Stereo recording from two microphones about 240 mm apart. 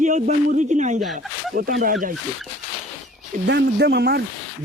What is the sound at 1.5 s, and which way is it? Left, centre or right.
Speech, right.